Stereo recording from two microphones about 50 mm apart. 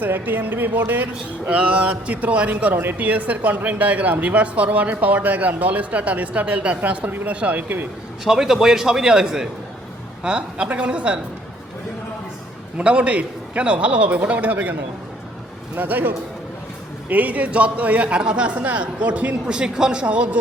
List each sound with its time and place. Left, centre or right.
0.0 s a man's voice: right
8.2 s a man's voice: centre
12.7 s a man's voice: right
19.5 s a man's voice: centre